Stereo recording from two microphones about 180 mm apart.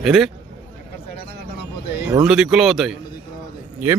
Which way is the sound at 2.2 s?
5° right (ahead or behind).